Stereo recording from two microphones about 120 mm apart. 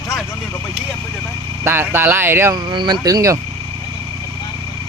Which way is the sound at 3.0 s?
30° right (ahead or behind).